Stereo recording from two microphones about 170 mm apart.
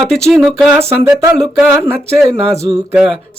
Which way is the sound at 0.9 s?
15° right (ahead or behind).